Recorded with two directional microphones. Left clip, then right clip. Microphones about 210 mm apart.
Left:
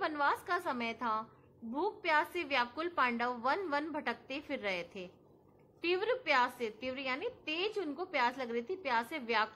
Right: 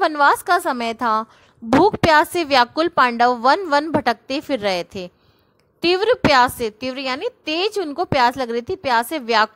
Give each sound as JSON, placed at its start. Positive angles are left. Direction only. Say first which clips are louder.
{"t": 0.0, "sound": "a woman's voice", "louder": "right 18 dB", "side_deg": -50}